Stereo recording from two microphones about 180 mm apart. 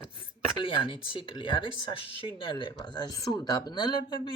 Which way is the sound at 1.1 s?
25° left (ahead or behind).